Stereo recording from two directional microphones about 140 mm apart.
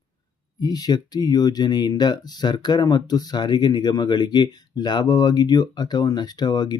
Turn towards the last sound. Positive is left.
turn(degrees=30)  # may be behind; listen again after turning